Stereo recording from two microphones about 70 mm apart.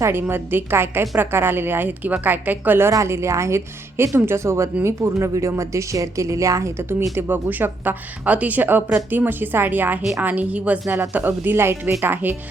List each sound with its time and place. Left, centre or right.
0.0 s a woman's voice: right
2.9 s a woman's voice: right
7.2 s a woman's voice: right
12.1 s a woman's voice: right